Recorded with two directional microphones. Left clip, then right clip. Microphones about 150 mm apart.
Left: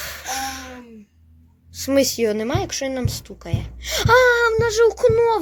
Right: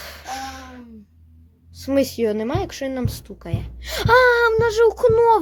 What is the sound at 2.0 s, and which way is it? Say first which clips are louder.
Speech: left 1 dB; 15° right (ahead or behind).